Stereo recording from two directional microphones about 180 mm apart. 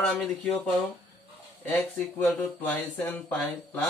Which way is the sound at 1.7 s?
5° left (ahead or behind).